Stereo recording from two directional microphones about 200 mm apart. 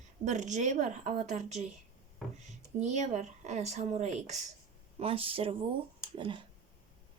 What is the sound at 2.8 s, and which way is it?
Speech, 35° right (ahead or behind).